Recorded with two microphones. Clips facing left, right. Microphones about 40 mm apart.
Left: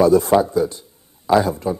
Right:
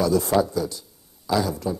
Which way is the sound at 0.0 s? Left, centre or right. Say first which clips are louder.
Left 6 dB; left.